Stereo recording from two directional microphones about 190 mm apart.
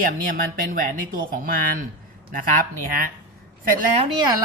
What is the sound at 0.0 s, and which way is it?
Speech, 45° right (ahead or behind).